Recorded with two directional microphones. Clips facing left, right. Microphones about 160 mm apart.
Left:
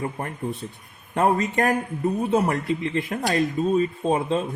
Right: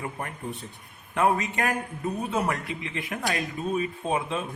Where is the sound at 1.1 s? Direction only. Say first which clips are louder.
Left 3 dB; 35° left (ahead or behind).